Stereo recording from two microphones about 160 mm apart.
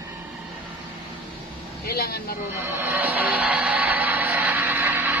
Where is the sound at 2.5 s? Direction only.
15° right (ahead or behind).